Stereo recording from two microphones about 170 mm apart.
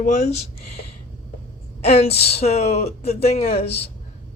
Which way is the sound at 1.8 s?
35° left (ahead or behind).